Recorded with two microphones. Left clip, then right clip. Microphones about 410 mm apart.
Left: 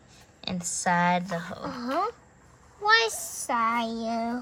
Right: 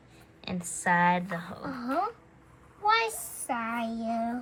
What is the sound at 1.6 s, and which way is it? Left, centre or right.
A child's voice, left.